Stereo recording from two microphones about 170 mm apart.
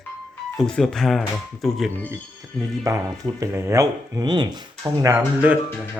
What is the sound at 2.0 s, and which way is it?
Speech, 20° right (ahead or behind).